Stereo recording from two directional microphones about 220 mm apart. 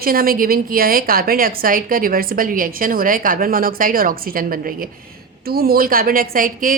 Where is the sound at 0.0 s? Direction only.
40° right (ahead or behind).